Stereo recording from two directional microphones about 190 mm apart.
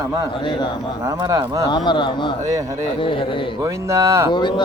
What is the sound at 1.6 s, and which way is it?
Speech, 25° left (ahead or behind).